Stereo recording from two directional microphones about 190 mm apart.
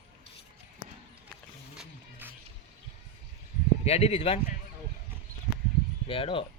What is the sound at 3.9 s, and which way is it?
Speech, 35° left (ahead or behind).